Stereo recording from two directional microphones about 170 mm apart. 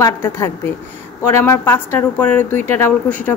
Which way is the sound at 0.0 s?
15° left (ahead or behind).